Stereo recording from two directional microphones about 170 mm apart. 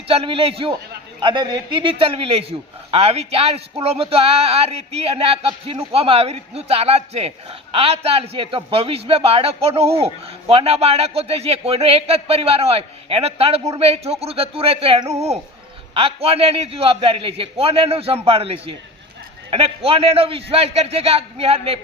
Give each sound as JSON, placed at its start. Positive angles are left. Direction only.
{"t": 0.1, "sound": "a man's voice", "side_deg": -35}